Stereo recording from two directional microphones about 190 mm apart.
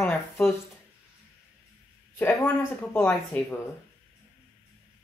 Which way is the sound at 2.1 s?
10° left (ahead or behind).